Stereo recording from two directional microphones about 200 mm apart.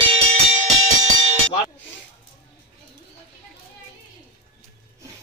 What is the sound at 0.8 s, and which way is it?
Music, 35° right (ahead or behind).